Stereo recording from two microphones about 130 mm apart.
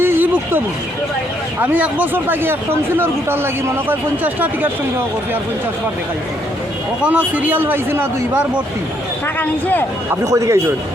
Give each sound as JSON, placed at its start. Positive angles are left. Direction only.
{"t": 0.0, "sound": "a sound", "side_deg": -15}
{"t": 1.6, "sound": "speech", "side_deg": -10}
{"t": 7.0, "sound": "speech", "side_deg": -10}
{"t": 9.2, "sound": "speech", "side_deg": 15}
{"t": 10.1, "sound": "speech", "side_deg": -25}